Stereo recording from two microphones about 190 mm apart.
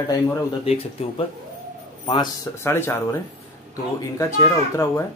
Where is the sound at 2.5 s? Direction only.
10° left (ahead or behind).